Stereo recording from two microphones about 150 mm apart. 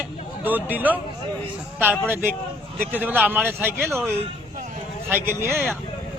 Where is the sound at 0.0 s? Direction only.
10° right (ahead or behind).